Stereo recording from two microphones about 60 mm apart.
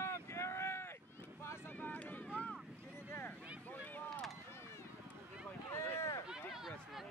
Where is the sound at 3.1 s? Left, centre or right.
Left.